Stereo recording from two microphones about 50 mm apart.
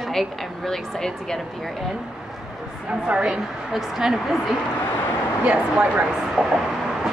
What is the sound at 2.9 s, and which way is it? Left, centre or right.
Speech, right.